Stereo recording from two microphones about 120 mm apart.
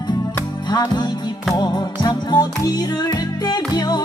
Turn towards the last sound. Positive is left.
turn(degrees=35)  # may be behind; listen again after turning